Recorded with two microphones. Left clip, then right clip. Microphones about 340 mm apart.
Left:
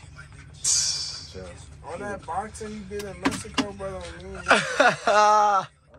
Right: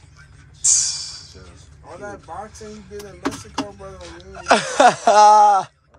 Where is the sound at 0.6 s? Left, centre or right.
Centre.